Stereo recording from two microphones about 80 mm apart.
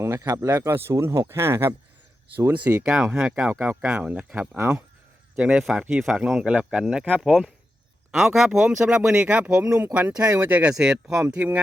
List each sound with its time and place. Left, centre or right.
0.5 s speech: right
0.9 s speech: right
1.4 s speech: right
2.5 s speech: right
2.8 s speech: centre; by 4.8 s right
5.4 s speech: centre
11.3 s speech: centre